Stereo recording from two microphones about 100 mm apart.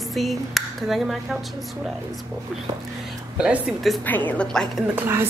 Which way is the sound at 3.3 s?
10° right (ahead or behind).